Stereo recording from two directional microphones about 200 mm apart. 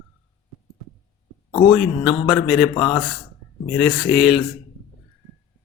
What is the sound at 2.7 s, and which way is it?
Speech, 25° left (ahead or behind).